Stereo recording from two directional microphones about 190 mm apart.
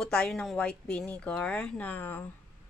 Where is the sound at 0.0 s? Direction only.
5° left (ahead or behind).